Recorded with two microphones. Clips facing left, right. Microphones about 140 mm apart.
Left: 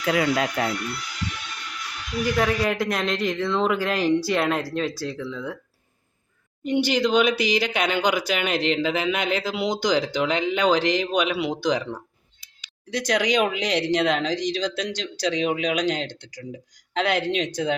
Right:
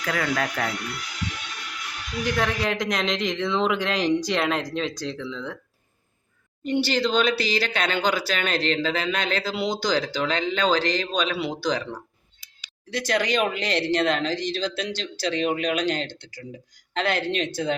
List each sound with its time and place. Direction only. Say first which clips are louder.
0.0 s speech: left 4 dB; 20° left (ahead or behind)
2.2 s speech: left 3 dB; 5° left (ahead or behind)
6.7 s speech: left 2 dB; 15° left (ahead or behind)
12.9 s speech: left 2 dB; centre (ahead or behind)